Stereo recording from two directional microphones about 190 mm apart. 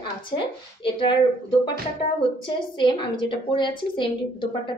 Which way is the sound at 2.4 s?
25° left (ahead or behind).